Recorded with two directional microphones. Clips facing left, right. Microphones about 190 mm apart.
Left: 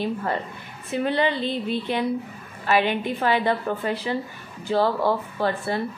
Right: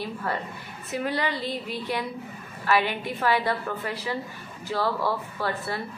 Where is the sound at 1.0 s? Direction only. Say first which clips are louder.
Left 6 dB; 25° left (ahead or behind).